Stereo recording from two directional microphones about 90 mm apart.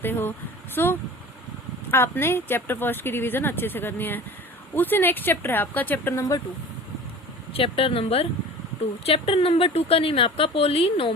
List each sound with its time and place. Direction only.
0.0 s speech: 25° left (ahead or behind)
7.5 s speech: 85° left